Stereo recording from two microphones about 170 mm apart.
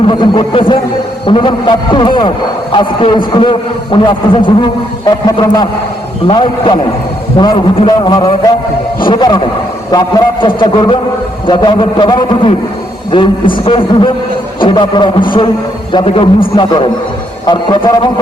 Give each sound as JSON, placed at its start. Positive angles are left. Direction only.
{"t": 0.1, "sound": "a man's voice", "side_deg": 30}